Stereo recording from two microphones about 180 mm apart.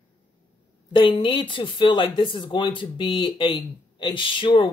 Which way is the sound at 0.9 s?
25° left (ahead or behind).